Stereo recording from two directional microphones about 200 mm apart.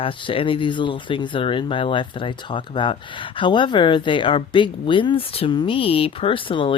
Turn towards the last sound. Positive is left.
turn(degrees=25)  # may be behind; listen again after turning